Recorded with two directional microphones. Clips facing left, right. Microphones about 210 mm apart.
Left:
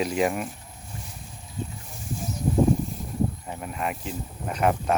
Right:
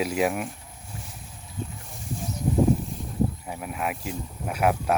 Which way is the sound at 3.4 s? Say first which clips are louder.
Even; 5° right (ahead or behind).